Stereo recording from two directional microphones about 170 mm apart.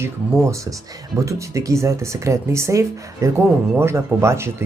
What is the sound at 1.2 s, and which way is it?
Speech, 20° right (ahead or behind).